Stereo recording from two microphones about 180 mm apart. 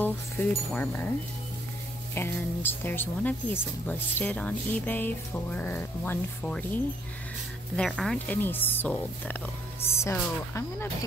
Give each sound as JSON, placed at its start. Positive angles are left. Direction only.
{"t": 0.0, "sound": "speech", "side_deg": 10}
{"t": 2.1, "sound": "speech", "side_deg": 10}
{"t": 7.7, "sound": "speech", "side_deg": 5}